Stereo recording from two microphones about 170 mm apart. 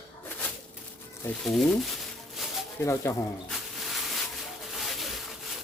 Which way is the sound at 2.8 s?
15° left (ahead or behind).